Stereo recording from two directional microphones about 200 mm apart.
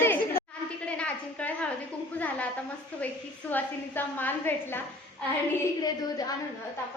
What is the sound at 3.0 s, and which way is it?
A woman's voice, 10° left (ahead or behind).